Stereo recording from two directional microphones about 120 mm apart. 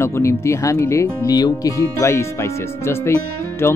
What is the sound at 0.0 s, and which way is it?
Speech, 25° left (ahead or behind).